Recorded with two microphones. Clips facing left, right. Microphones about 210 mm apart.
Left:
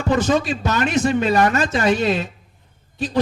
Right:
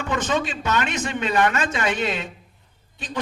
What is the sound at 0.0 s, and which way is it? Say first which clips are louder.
Speech: left 6 dB; 35° left (ahead or behind).